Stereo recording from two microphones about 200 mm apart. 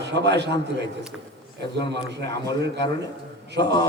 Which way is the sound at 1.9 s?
60° right (ahead or behind).